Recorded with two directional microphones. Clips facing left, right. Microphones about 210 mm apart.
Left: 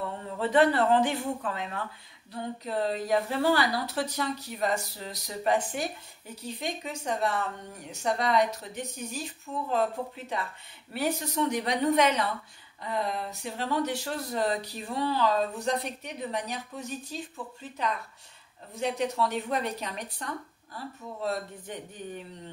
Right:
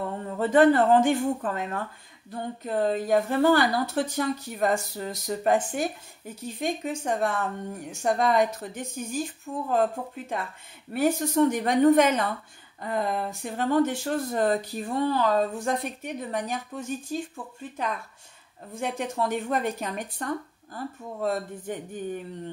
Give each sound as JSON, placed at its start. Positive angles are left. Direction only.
{"t": 0.4, "sound": "speech", "side_deg": -50}